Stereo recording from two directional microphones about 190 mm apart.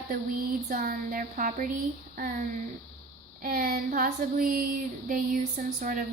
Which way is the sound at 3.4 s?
50° right (ahead or behind).